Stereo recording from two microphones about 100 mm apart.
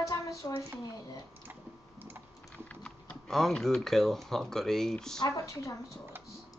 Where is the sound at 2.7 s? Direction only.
10° left (ahead or behind).